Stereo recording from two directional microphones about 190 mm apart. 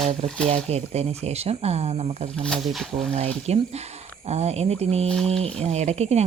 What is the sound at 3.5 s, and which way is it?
Speech, 35° right (ahead or behind).